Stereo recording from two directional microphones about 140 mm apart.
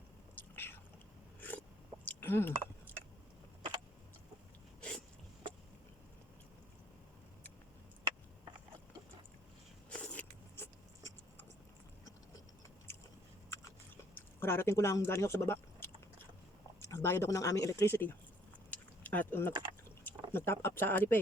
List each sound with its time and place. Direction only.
0.3 s chewing: 15° left (ahead or behind)
2.0 s a sound: 15° left (ahead or behind)
9.9 s a sound: 10° left (ahead or behind)
13.5 s chewing: 15° left (ahead or behind)
16.9 s speech: 20° left (ahead or behind)
18.7 s keys jangling: 10° left (ahead or behind)
20.3 s speech: 15° left (ahead or behind)